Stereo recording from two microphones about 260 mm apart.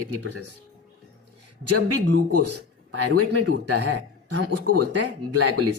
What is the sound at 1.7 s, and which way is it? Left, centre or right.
Speech, right.